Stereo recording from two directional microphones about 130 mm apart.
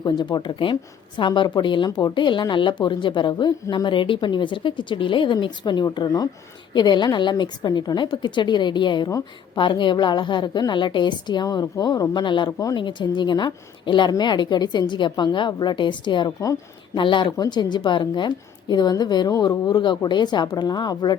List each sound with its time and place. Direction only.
0.0 s a woman's voice: 35° left (ahead or behind)